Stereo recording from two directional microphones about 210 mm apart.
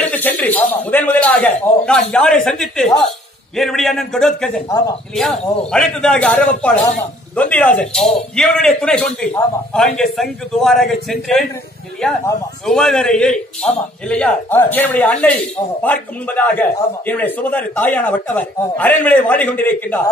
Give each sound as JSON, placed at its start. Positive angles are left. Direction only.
{"t": 0.0, "sound": "a man's voice", "side_deg": 5}
{"t": 4.6, "sound": "a man's voice", "side_deg": 15}
{"t": 5.1, "sound": "a man's voice", "side_deg": 0}
{"t": 10.6, "sound": "a man's voice", "side_deg": 0}
{"t": 12.6, "sound": "a man's voice", "side_deg": 0}